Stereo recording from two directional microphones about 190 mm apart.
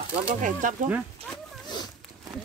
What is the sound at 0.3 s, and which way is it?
Speech, 45° right (ahead or behind).